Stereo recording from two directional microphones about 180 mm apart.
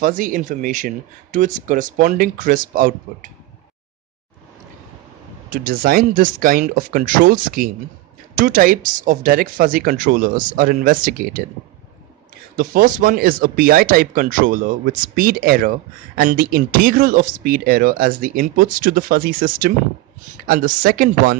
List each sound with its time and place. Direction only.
0.0 s speech: 50° right (ahead or behind)
5.5 s speech: 50° right (ahead or behind)
12.5 s speech: 50° right (ahead or behind)